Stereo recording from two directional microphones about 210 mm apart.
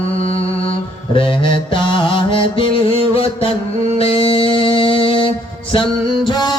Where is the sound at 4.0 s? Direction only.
25° left (ahead or behind).